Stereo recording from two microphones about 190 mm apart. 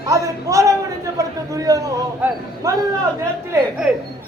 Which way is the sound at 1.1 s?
20° right (ahead or behind).